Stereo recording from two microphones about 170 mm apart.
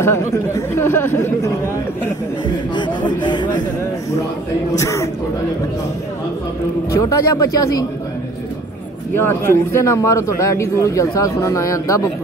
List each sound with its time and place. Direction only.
0.0 s speech: 15° left (ahead or behind)
2.7 s speech: 25° left (ahead or behind)
4.7 s speech: 20° left (ahead or behind)
6.9 s speech: 20° left (ahead or behind)
9.1 s speech: 15° left (ahead or behind)